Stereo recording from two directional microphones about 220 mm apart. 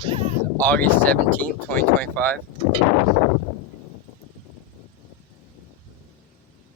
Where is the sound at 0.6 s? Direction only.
10° left (ahead or behind).